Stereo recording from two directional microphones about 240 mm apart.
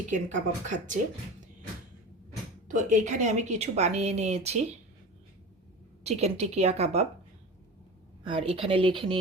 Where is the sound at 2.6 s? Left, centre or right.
Right.